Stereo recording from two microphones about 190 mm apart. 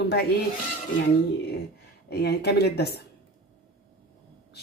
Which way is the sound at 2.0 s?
60° left (ahead or behind).